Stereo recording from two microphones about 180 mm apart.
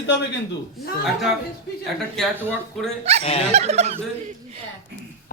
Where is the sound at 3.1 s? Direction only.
35° right (ahead or behind).